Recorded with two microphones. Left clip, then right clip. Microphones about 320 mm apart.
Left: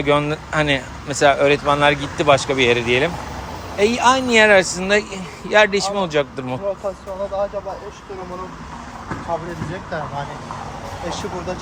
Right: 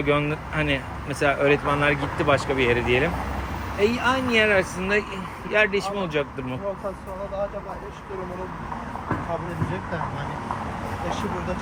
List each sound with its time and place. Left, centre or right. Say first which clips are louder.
0.0 s speech: left 5 dB; centre